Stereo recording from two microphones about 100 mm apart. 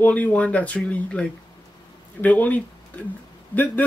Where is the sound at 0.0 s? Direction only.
15° left (ahead or behind).